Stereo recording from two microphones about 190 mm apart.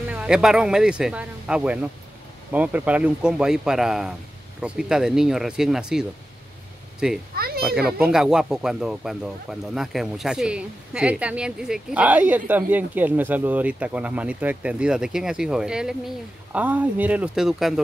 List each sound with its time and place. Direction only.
0.1 s speech: 5° right (ahead or behind)
7.3 s children playing: 55° right (ahead or behind)
7.6 s speech: 5° right (ahead or behind)